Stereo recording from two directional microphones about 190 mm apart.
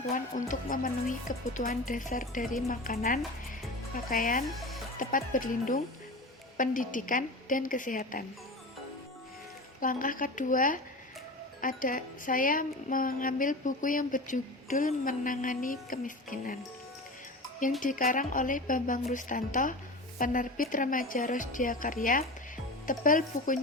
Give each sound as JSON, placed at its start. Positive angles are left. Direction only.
{"t": 0.0, "sound": "speech", "side_deg": 40}
{"t": 4.4, "sound": "speech", "side_deg": 0}
{"t": 4.9, "sound": "speech", "side_deg": 45}
{"t": 9.8, "sound": "speech", "side_deg": 45}
{"t": 17.7, "sound": "speech", "side_deg": 45}